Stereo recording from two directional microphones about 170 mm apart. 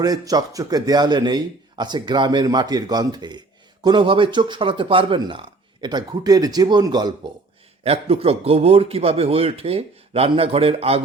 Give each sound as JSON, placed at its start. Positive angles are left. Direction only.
{"t": 0.0, "sound": "speech", "side_deg": -20}
{"t": 7.9, "sound": "a man's voice", "side_deg": -35}